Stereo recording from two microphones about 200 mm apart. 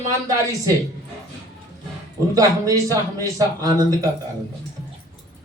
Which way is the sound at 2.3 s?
15° right (ahead or behind).